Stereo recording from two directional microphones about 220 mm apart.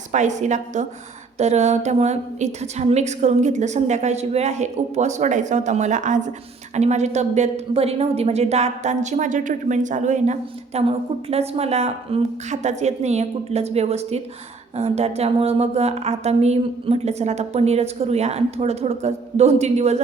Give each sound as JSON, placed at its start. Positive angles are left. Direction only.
{"t": 0.1, "sound": "a woman's voice", "side_deg": -35}